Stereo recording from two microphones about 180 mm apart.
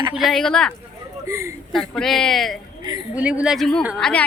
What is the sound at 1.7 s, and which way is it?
Speech, 5° left (ahead or behind).